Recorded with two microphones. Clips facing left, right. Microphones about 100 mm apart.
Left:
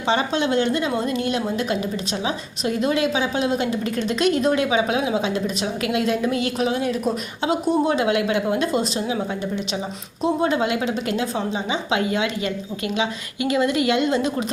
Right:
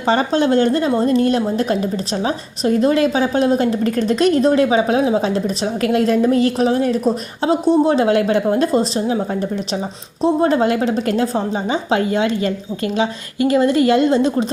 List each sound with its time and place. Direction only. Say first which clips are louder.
0.0 s a woman's voice: right 5 dB; 40° right (ahead or behind)